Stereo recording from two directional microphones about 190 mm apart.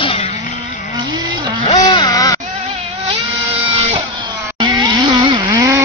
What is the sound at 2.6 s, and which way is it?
Vehicle, 35° right (ahead or behind).